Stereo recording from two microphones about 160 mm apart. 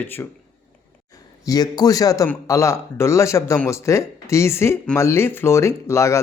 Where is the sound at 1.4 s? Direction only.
25° left (ahead or behind).